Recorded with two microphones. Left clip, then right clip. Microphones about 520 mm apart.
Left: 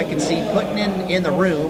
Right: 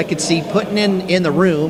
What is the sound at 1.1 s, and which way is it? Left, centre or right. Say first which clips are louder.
Speech: right 3 dB; right.